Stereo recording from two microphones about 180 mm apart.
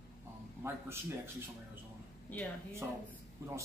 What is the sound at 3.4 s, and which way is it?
Speech, 15° right (ahead or behind).